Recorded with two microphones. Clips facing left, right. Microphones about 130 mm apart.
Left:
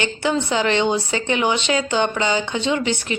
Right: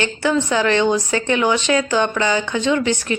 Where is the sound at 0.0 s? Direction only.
20° left (ahead or behind).